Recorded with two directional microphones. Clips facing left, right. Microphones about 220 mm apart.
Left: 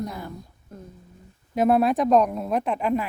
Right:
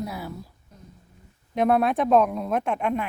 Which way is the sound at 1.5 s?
Centre (ahead or behind).